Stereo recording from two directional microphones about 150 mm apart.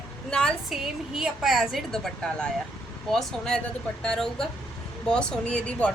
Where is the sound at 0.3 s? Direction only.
5° left (ahead or behind).